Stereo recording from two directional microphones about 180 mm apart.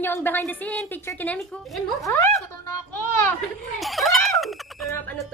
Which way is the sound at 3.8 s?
Centre (ahead or behind).